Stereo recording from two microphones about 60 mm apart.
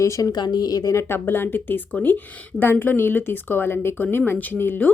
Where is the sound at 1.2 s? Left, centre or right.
Left.